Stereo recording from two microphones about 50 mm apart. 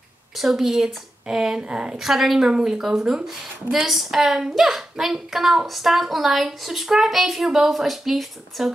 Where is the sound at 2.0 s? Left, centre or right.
Centre.